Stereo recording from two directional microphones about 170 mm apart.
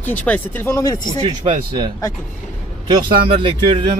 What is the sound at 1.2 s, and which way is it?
Speech, 25° right (ahead or behind).